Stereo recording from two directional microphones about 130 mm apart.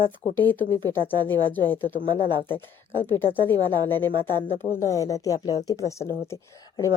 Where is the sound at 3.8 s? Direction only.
20° left (ahead or behind).